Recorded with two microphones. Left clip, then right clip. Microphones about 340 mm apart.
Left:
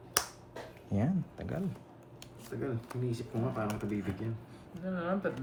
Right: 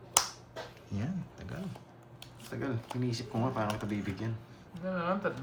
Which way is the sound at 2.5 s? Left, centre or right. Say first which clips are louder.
Even; right.